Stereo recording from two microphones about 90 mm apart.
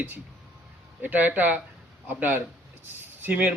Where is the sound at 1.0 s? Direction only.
20° right (ahead or behind).